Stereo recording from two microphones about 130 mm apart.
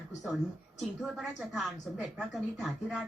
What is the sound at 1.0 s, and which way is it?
A woman's voice, centre (ahead or behind).